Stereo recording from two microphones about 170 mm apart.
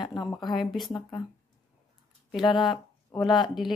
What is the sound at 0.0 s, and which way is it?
Speech, 25° left (ahead or behind).